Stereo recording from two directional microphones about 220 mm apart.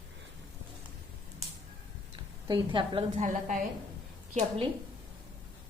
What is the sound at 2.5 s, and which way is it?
Speech, 20° right (ahead or behind).